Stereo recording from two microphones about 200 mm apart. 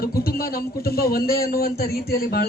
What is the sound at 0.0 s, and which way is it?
A man's voice, 50° left (ahead or behind).